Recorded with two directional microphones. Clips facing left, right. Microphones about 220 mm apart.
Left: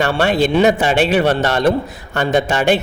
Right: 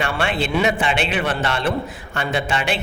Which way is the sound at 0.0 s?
40° left (ahead or behind).